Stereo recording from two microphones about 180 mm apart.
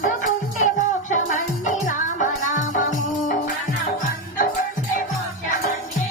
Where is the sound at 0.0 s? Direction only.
45° left (ahead or behind).